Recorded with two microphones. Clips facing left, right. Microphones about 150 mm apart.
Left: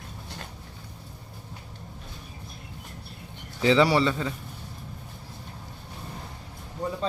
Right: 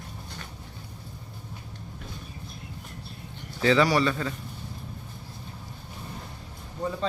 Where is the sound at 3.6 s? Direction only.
20° left (ahead or behind).